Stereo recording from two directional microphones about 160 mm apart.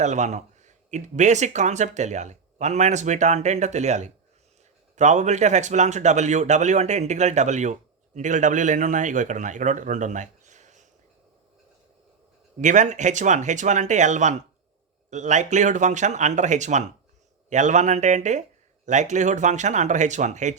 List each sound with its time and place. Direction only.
0.0 s speech: 45° right (ahead or behind)
12.5 s speech: 50° right (ahead or behind)